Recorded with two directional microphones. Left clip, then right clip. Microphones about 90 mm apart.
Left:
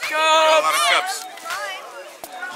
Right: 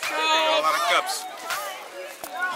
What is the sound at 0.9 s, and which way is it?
Run, centre (ahead or behind).